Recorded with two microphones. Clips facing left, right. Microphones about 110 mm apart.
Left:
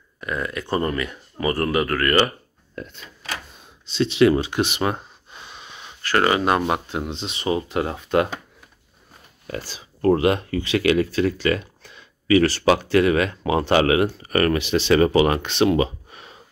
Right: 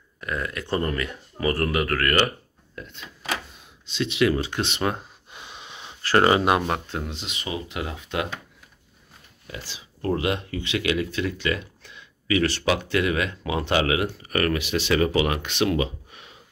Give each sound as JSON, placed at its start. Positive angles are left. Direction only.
{"t": 0.2, "sound": "speech", "side_deg": 5}
{"t": 3.8, "sound": "speech", "side_deg": 35}
{"t": 4.4, "sound": "speech", "side_deg": 15}
{"t": 5.3, "sound": "a sound", "side_deg": -20}
{"t": 6.6, "sound": "speech", "side_deg": 10}
{"t": 7.0, "sound": "speech", "side_deg": 25}
{"t": 9.5, "sound": "speech", "side_deg": 45}